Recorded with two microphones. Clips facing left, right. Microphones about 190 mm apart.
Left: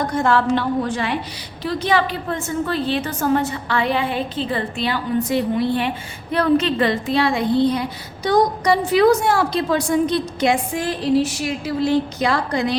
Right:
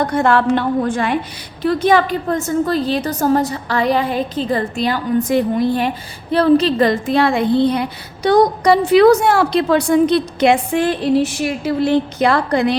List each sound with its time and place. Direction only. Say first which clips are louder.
0.1 s a woman's voice: right 3 dB; 65° right (ahead or behind)